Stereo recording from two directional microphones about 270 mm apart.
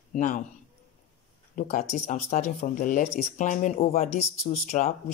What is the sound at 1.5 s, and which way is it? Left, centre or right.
Speech, left.